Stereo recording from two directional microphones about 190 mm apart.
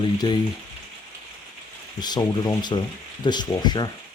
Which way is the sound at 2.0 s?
20° left (ahead or behind).